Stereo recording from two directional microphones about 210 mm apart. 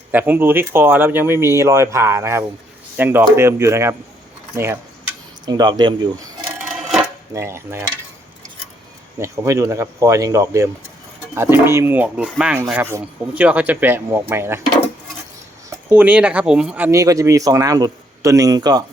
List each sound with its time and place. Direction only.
0.1 s speech: 10° right (ahead or behind)
7.3 s speech: 10° right (ahead or behind)
9.1 s speech: 15° right (ahead or behind)
15.9 s speech: 5° right (ahead or behind)